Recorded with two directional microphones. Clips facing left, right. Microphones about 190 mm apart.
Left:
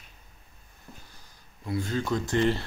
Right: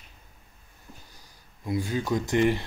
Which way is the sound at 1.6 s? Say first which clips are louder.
Right 1 dB; 15° right (ahead or behind).